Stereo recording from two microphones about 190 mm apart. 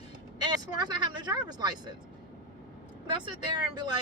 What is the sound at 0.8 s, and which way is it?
Speech, 20° right (ahead or behind).